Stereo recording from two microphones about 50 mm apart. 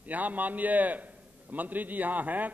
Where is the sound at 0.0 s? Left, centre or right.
Right.